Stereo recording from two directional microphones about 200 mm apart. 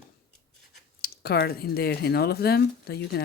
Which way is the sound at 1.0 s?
50° left (ahead or behind).